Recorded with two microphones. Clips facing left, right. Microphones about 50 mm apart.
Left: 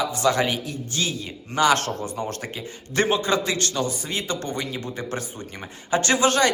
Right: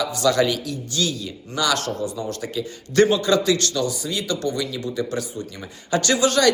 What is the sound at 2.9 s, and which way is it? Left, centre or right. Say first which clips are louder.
A man's voice: right 4 dB; left.